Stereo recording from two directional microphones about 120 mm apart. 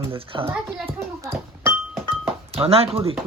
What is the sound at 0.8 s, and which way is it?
Speech, 20° right (ahead or behind).